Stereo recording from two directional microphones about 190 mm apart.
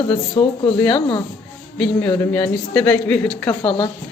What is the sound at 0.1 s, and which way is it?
Speech, 25° left (ahead or behind).